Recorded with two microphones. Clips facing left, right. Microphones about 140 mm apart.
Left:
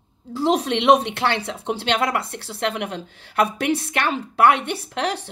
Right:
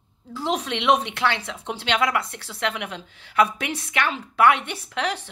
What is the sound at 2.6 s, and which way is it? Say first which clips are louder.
A woman's voice: left 3 dB; 45° left (ahead or behind).